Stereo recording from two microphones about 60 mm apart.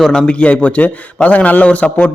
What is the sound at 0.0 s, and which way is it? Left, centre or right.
A man's voice, centre.